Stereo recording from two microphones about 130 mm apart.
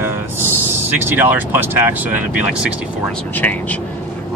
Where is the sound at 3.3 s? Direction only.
10° left (ahead or behind).